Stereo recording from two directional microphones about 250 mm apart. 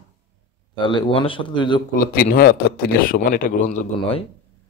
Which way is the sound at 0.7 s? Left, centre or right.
Centre.